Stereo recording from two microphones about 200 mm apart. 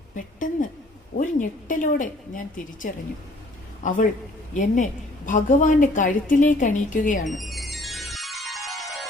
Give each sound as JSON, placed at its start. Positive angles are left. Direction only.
{"t": 0.3, "sound": "a woman's voice", "side_deg": 40}
{"t": 4.5, "sound": "a woman's voice", "side_deg": 40}
{"t": 7.3, "sound": "music", "side_deg": 0}